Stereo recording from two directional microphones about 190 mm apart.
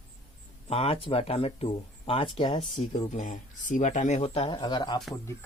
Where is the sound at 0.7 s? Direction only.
30° left (ahead or behind).